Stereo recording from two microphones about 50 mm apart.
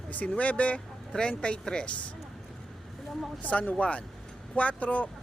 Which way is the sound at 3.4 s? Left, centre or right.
Left.